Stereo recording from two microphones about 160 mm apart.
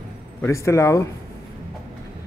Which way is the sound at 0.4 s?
20° left (ahead or behind).